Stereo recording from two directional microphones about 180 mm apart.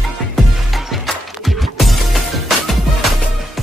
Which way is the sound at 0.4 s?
Centre (ahead or behind).